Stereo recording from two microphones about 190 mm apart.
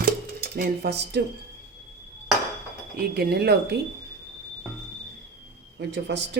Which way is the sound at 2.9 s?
55° right (ahead or behind).